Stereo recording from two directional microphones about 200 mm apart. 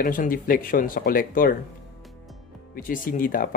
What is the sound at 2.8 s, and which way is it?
Speech, 45° left (ahead or behind).